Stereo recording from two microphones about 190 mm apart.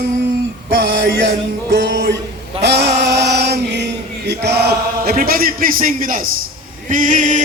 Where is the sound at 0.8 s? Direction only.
70° right (ahead or behind).